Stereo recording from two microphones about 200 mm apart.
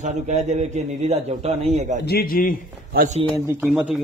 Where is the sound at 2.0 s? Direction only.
50° left (ahead or behind).